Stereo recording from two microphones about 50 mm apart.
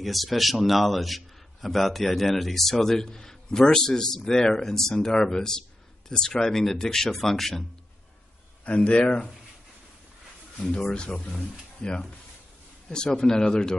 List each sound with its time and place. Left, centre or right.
0.0 s a man's voice: centre
8.6 s speech: left
10.7 s a man's voice: centre